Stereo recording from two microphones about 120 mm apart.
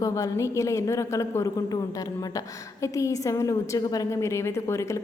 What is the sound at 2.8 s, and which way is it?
A woman's voice, 25° left (ahead or behind).